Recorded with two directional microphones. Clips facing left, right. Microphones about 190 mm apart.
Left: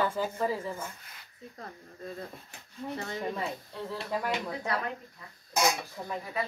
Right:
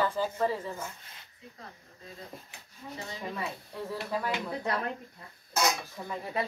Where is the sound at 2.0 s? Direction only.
55° left (ahead or behind).